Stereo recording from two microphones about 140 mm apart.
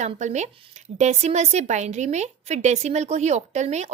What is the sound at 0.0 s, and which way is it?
A woman's voice, 55° right (ahead or behind).